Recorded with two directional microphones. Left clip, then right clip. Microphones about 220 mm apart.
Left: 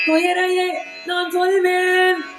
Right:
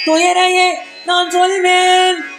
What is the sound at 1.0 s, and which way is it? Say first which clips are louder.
Music: right 7 dB; 25° right (ahead or behind).